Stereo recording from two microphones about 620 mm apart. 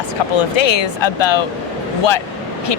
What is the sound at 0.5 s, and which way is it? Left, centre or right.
Speech, left.